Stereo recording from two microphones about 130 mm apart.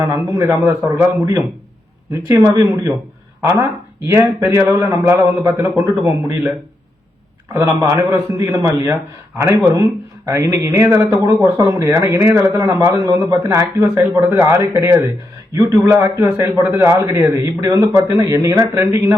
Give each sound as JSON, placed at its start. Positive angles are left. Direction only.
{"t": 0.0, "sound": "speech", "side_deg": -25}
{"t": 7.5, "sound": "speech", "side_deg": -25}